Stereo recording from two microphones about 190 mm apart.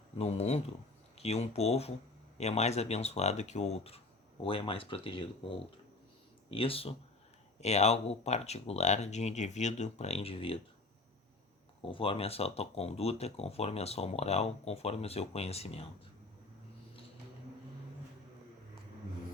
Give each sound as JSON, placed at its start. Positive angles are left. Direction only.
{"t": 0.2, "sound": "speech", "side_deg": 35}
{"t": 11.8, "sound": "speech", "side_deg": 30}